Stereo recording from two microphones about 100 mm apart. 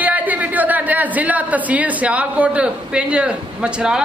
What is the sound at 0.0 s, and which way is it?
Speech, 15° right (ahead or behind).